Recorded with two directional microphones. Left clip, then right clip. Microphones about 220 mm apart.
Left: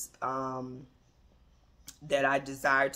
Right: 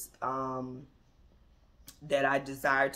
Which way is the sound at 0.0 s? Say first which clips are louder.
Even; 10° left (ahead or behind).